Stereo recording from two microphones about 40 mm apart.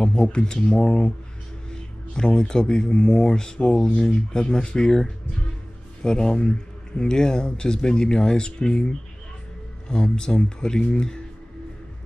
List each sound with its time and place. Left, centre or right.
0.0 s speech: left